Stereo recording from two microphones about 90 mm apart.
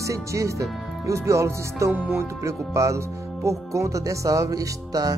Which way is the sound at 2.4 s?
35° right (ahead or behind).